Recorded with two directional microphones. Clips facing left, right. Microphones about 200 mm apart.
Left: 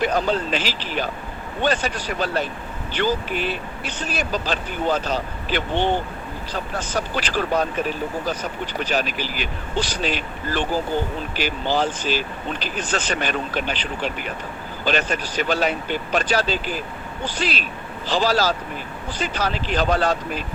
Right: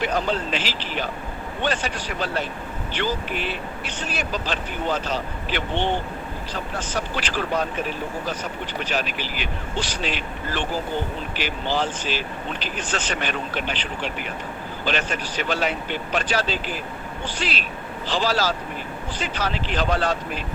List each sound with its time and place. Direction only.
0.5 s speech: 40° left (ahead or behind)
8.8 s speech: 40° left (ahead or behind)